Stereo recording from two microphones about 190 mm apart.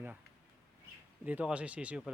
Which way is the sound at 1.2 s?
10° right (ahead or behind).